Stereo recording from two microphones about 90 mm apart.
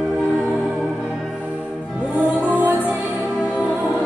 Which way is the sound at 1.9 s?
10° right (ahead or behind).